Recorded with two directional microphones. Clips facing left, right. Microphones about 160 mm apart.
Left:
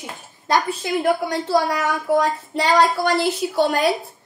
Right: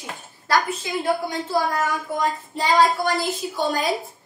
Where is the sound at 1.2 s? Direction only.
75° left (ahead or behind).